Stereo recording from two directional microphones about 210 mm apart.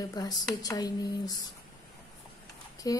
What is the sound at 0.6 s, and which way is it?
Speech, 20° left (ahead or behind).